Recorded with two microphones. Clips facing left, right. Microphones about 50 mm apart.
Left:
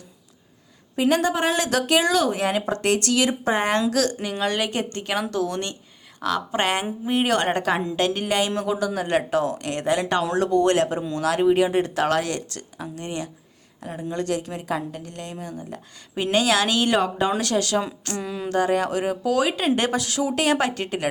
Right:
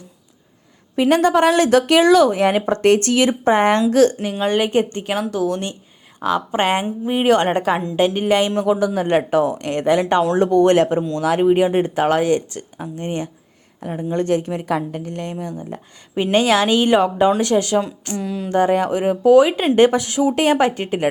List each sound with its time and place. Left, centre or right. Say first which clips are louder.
0.9 s speech: right 6 dB; right
5.3 s speech: right 4 dB; centre; by 15.6 s right
15.7 s speech: right 6 dB; right
18.2 s a sound: right 5 dB; centre
18.4 s speech: right 5 dB; right
20.1 s speech: right 6 dB; centre